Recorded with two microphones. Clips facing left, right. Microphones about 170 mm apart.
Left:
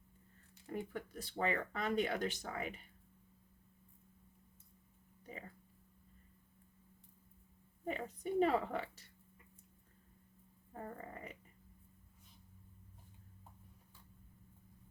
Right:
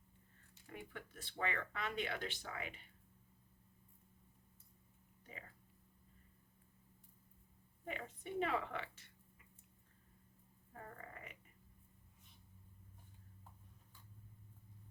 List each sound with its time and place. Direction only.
0.7 s speech: 40° left (ahead or behind)
7.9 s speech: 40° left (ahead or behind)
10.8 s a sound: 30° left (ahead or behind)